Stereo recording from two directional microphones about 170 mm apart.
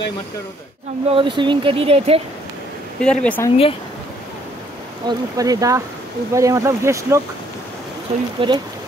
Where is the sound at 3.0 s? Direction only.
5° left (ahead or behind).